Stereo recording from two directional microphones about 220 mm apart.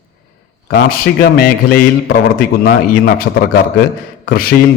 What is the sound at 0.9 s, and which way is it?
Speech, 40° left (ahead or behind).